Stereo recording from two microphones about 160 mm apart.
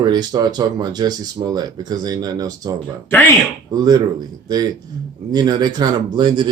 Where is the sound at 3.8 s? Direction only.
25° right (ahead or behind).